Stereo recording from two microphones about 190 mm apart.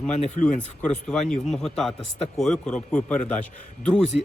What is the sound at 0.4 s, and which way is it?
Speech, 40° left (ahead or behind).